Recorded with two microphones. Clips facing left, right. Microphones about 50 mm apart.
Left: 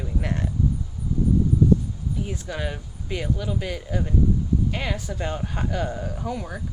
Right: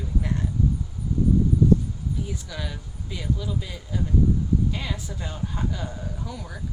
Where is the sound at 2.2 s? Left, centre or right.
Left.